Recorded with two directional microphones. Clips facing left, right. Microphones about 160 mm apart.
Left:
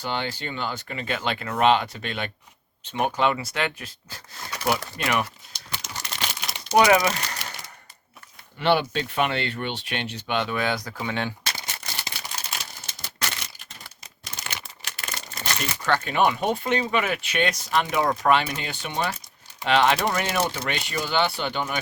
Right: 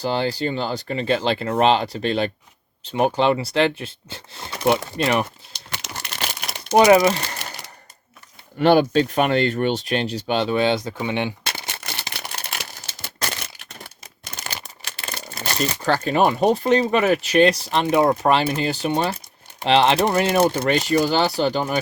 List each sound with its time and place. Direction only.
0.0 s speech: 35° right (ahead or behind)
5.5 s crumpling: 65° right (ahead or behind)
6.7 s speech: 25° right (ahead or behind)
8.5 s speech: 45° right (ahead or behind); by 11.3 s 20° right (ahead or behind)
11.5 s crumpling: 65° right (ahead or behind)
14.4 s a sound: 30° right (ahead or behind)
15.5 s speech: 35° right (ahead or behind)
20.4 s speech: 50° right (ahead or behind)